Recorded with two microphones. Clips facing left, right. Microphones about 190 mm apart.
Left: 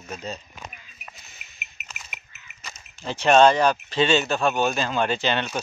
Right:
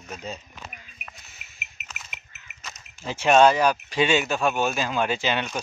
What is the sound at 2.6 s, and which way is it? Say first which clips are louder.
Speech: left 1 dB; 10° right (ahead or behind).